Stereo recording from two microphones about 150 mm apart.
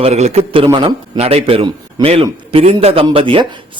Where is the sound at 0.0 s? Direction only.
45° right (ahead or behind).